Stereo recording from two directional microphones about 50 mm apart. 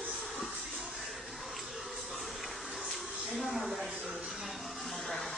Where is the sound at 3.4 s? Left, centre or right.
Centre.